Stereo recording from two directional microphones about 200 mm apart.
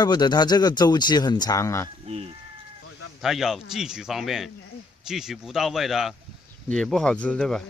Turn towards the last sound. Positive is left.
turn(degrees=0)  # may be behind; listen again after turning